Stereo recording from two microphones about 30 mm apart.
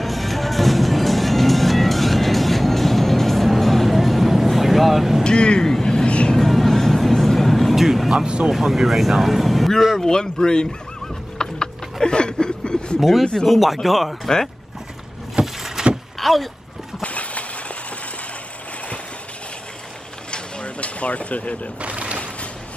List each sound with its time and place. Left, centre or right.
0.0 s music: centre
5.2 s vehicle: left
5.6 s vehicle: centre
6.3 s music: centre
7.7 s vehicle: centre
8.5 s speech: centre
9.9 s a man's voice: left
11.3 s a sound: left
13.5 s speech: centre
15.4 s vehicle: centre
16.2 s vehicle: centre
17.0 s train: left
20.2 s a sound: left
21.8 s a sound: right